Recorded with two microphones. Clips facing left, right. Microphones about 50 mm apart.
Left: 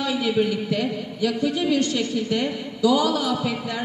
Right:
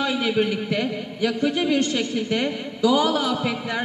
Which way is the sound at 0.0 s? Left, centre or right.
Right.